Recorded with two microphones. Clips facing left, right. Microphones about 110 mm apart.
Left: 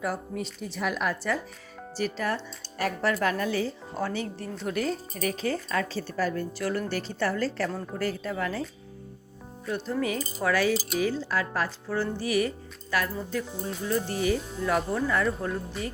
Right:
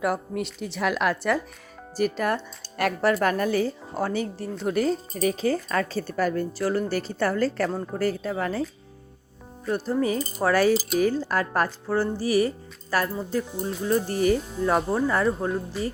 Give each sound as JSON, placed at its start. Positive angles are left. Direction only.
{"t": 0.0, "sound": "a woman's voice", "side_deg": -65}
{"t": 2.0, "sound": "speech", "side_deg": -50}
{"t": 3.0, "sound": "speech", "side_deg": -45}
{"t": 9.6, "sound": "speech", "side_deg": -40}
{"t": 10.4, "sound": "speech", "side_deg": -45}
{"t": 12.2, "sound": "speech", "side_deg": -35}
{"t": 15.8, "sound": "speech", "side_deg": 0}